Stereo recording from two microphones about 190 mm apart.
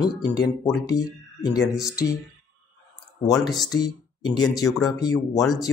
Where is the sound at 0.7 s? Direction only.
20° left (ahead or behind).